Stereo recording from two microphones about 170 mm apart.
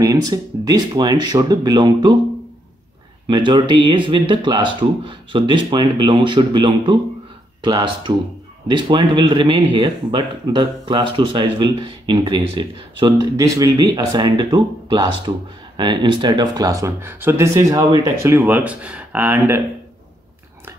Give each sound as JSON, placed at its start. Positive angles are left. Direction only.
{"t": 0.0, "sound": "speech", "side_deg": -20}
{"t": 3.3, "sound": "speech", "side_deg": -30}